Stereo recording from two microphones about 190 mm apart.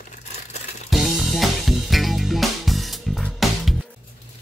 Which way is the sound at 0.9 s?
Centre (ahead or behind).